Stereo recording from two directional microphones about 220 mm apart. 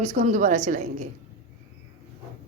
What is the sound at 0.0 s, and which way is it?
Speech, 35° right (ahead or behind).